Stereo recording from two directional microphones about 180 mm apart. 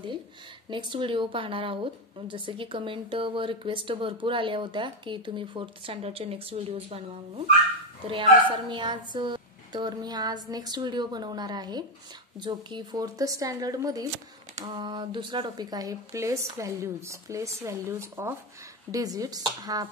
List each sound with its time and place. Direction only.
0.7 s speech: 25° right (ahead or behind)